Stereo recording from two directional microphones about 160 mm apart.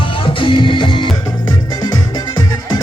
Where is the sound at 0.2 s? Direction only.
30° left (ahead or behind).